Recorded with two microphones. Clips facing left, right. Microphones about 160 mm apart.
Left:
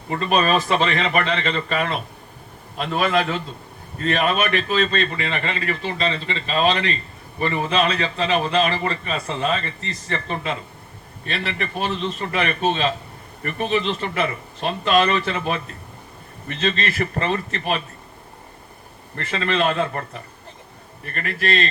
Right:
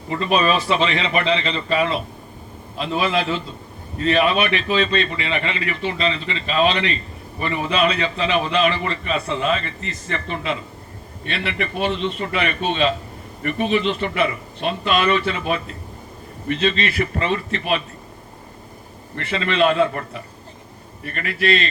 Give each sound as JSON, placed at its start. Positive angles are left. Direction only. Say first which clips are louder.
{"t": 0.1, "sound": "a man's voice", "louder": "even", "side_deg": 45}
{"t": 19.1, "sound": "a man's voice", "louder": "even", "side_deg": 40}